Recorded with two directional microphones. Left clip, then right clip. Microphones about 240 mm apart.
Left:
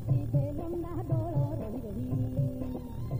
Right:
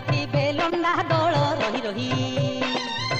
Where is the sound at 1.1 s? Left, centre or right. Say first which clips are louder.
Right 16 dB; left.